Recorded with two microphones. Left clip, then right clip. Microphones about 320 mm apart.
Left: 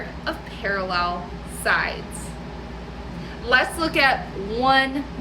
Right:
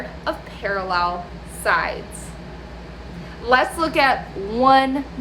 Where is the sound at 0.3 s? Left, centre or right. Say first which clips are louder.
Right 2 dB; centre.